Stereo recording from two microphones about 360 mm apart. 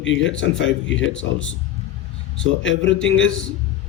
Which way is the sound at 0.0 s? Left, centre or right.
Left.